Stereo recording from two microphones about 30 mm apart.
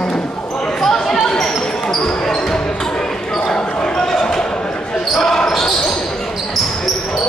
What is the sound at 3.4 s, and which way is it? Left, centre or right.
Basketball bounce, left.